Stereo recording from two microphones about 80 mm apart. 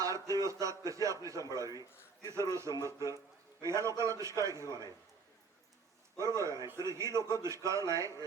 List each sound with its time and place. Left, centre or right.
0.0 s a man's voice: right
6.1 s a man's voice: right